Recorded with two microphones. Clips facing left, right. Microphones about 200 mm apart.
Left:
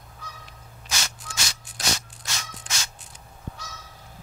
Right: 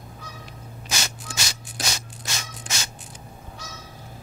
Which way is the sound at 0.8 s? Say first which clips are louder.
Right 2 dB; 10° right (ahead or behind).